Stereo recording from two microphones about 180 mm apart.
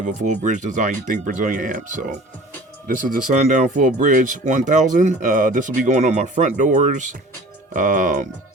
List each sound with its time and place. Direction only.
0.0 s speech: 45° right (ahead or behind)